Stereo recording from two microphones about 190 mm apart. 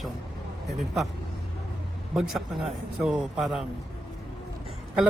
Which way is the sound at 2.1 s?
Centre (ahead or behind).